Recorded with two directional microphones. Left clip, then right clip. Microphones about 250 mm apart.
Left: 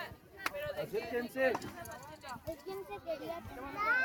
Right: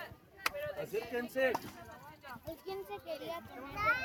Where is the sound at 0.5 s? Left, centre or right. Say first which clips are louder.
Left 1 dB; left.